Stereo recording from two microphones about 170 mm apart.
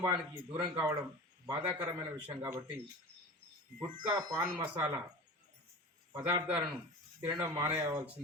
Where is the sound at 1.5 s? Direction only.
10° right (ahead or behind).